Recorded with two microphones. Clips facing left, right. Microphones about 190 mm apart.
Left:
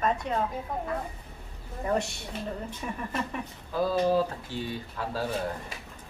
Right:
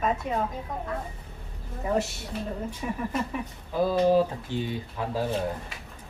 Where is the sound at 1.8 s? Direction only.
5° right (ahead or behind).